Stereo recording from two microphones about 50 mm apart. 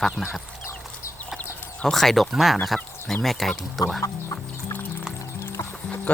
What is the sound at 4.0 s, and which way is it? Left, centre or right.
Music, left.